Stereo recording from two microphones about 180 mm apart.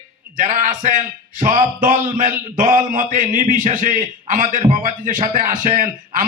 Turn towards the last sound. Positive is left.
turn(degrees=-45)  # may be behind; listen again after turning